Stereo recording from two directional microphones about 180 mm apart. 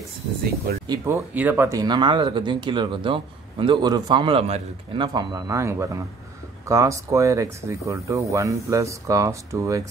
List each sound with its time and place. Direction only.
0.8 s speech: 15° right (ahead or behind)